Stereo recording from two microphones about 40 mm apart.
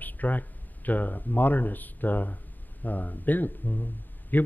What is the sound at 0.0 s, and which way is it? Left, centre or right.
A man's voice, left.